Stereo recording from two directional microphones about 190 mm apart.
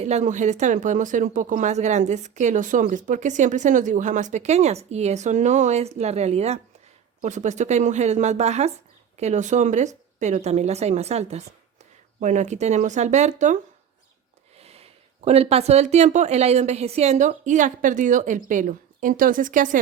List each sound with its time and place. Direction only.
0.0 s speech: 35° right (ahead or behind)
14.6 s speech: 30° right (ahead or behind)